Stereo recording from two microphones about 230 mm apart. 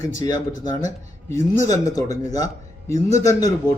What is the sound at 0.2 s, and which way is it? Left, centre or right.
A man's voice, centre.